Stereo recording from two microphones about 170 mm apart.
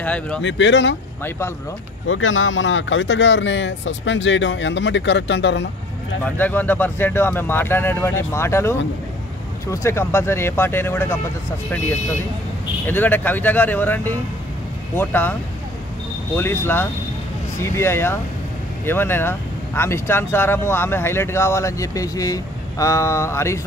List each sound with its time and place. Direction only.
0.0 s speech: 5° left (ahead or behind)
0.4 s speech: 90° left
2.7 s speech: 90° left
6.2 s speech: 10° left (ahead or behind)
12.8 s speech: 10° left (ahead or behind)
16.3 s speech: 15° left (ahead or behind)